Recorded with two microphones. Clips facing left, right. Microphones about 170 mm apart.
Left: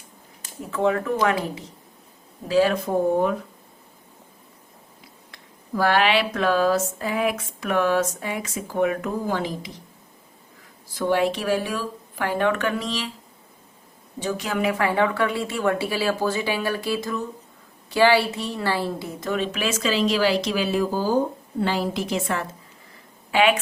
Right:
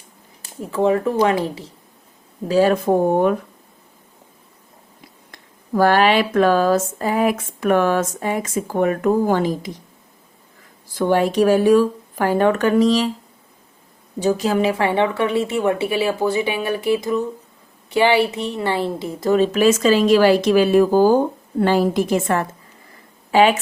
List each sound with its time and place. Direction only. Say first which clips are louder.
0.7 s a woman's voice: right 4 dB; 30° right (ahead or behind)
2.5 s speech: right 4 dB; 45° right (ahead or behind)
5.3 s speech: right 7 dB; 45° right (ahead or behind)
10.9 s speech: right 5 dB; 50° right (ahead or behind)
14.2 s a woman's voice: right 7 dB; 35° right (ahead or behind); by 21.2 s 65° right (ahead or behind)
21.6 s speech: right 7 dB; 50° right (ahead or behind)
23.3 s speech: right 5 dB; 40° right (ahead or behind)